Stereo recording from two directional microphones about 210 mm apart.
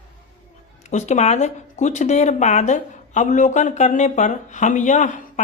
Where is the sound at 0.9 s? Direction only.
35° left (ahead or behind).